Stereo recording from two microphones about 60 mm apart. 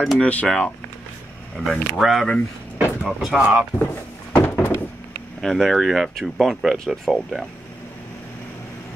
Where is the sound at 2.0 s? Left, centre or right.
Centre.